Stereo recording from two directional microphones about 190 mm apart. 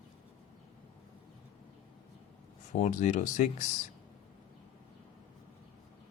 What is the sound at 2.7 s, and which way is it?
Speech, 40° left (ahead or behind).